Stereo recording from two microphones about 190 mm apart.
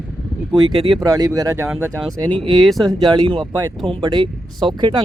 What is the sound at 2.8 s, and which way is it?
Speech, 20° right (ahead or behind).